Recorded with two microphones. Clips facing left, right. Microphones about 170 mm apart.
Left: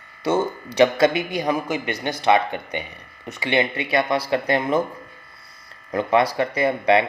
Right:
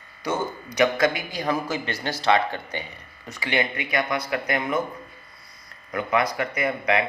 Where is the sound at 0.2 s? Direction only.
30° left (ahead or behind).